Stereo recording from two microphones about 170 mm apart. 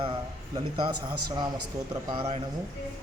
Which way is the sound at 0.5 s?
25° right (ahead or behind).